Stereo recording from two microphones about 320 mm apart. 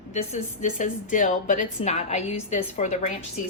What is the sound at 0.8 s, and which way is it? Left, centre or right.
A woman's voice, left.